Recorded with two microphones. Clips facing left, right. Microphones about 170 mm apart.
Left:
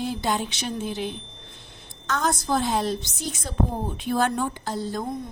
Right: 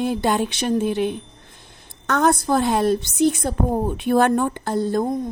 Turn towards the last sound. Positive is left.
turn(degrees=-50)  # may be behind; listen again after turning